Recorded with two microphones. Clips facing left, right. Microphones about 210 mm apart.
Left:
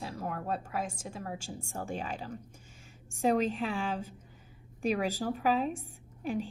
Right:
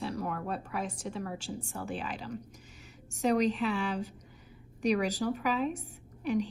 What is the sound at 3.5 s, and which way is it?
A woman's voice, 40° left (ahead or behind).